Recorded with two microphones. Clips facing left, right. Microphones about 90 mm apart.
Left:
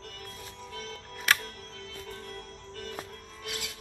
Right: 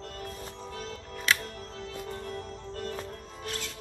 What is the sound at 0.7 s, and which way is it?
Music, 30° right (ahead or behind).